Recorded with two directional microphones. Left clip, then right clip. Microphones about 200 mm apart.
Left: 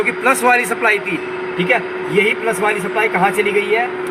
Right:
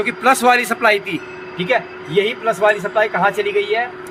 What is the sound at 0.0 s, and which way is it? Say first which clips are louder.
Speech: even; 50° right (ahead or behind).